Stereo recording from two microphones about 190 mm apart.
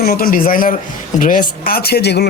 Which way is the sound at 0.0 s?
50° left (ahead or behind).